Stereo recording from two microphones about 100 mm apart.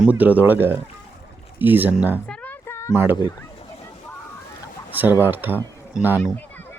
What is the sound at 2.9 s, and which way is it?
Speech, 20° right (ahead or behind).